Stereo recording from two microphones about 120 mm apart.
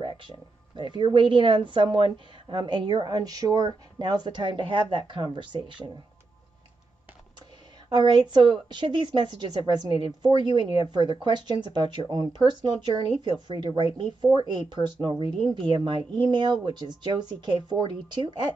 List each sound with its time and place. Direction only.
0.0 s a woman's voice: 40° right (ahead or behind)
7.9 s a woman's voice: 40° right (ahead or behind)